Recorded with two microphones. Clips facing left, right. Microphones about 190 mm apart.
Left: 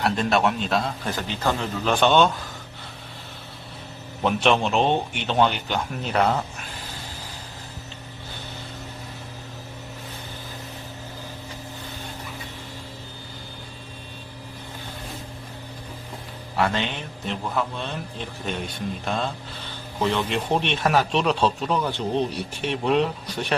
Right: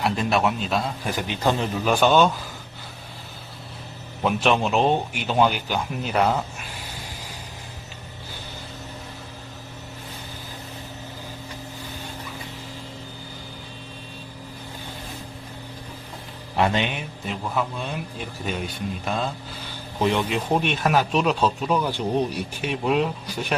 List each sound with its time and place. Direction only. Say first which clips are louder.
0.0 s a man's voice: left 1 dB; 5° right (ahead or behind)
1.1 s a man's voice: right 3 dB; 15° right (ahead or behind)
4.2 s a man's voice: even; centre (ahead or behind)
16.6 s a man's voice: right 2 dB; 15° right (ahead or behind)
20.0 s a man's voice: right 2 dB; 15° right (ahead or behind)
20.2 s a man's voice: right 1 dB; 5° right (ahead or behind)